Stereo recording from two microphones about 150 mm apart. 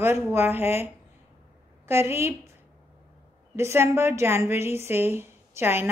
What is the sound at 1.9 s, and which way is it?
Speech, 15° right (ahead or behind).